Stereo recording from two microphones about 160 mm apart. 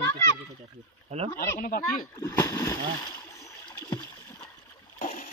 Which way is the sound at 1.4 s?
60° left (ahead or behind).